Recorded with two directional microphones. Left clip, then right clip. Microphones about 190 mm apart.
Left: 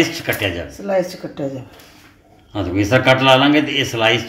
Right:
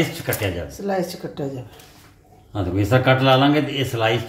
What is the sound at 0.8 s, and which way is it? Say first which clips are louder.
Speech: left 5 dB; 15° left (ahead or behind).